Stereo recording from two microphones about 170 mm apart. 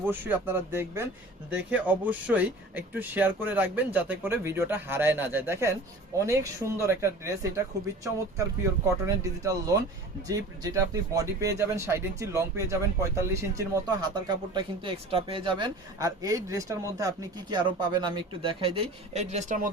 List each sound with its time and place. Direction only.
0.0 s speech: 10° right (ahead or behind)
9.0 s speech: 20° right (ahead or behind); by 19.7 s 50° right (ahead or behind)